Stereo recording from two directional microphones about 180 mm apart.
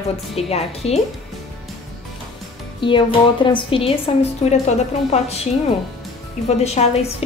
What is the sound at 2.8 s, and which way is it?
A woman's voice, 30° left (ahead or behind).